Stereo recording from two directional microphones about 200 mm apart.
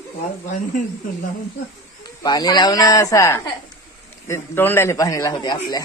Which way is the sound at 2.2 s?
20° left (ahead or behind).